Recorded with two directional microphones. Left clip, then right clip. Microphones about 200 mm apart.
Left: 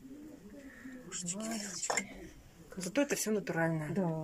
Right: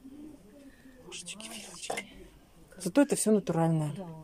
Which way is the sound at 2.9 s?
20° right (ahead or behind).